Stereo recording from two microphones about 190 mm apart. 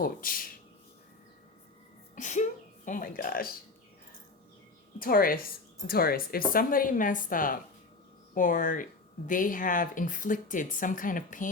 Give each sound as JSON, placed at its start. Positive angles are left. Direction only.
{"t": 0.0, "sound": "speech", "side_deg": 50}
{"t": 2.1, "sound": "speech", "side_deg": 40}
{"t": 4.9, "sound": "speech", "side_deg": 50}